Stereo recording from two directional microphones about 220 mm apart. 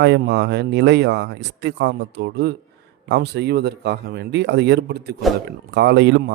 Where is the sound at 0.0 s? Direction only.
50° right (ahead or behind).